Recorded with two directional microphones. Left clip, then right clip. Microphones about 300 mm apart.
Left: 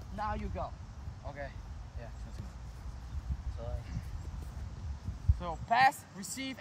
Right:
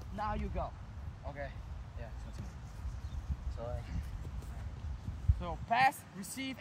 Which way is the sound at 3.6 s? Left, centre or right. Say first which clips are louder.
Right 2 dB; centre.